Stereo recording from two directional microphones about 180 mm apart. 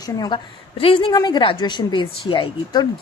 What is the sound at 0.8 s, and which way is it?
Speech, 30° left (ahead or behind).